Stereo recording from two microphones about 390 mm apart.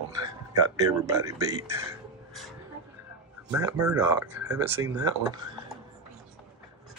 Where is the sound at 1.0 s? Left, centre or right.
Centre.